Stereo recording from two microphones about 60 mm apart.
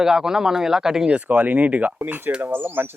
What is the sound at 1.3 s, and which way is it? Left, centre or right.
Speech, right.